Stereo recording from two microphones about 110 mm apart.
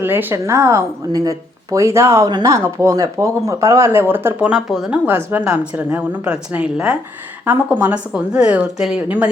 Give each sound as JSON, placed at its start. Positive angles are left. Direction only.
{"t": 0.0, "sound": "a woman's voice", "side_deg": -20}
{"t": 5.0, "sound": "a woman's voice", "side_deg": -20}